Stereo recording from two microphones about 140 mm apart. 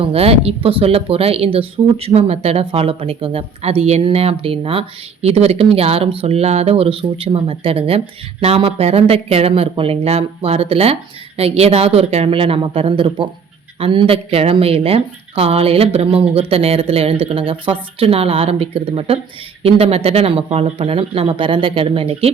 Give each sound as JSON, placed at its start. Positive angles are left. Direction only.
{"t": 0.0, "sound": "speech", "side_deg": -45}